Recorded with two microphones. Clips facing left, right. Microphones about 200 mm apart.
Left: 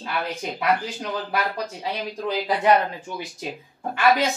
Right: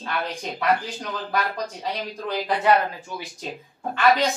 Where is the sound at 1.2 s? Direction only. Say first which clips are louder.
Right 4 dB; 10° left (ahead or behind).